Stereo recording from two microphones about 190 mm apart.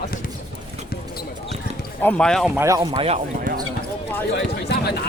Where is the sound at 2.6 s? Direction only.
15° right (ahead or behind).